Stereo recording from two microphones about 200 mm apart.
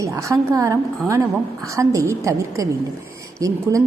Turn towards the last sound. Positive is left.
turn(degrees=-15)  # may be behind; listen again after turning